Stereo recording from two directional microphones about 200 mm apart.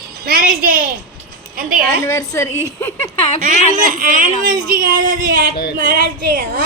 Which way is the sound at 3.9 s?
45° right (ahead or behind).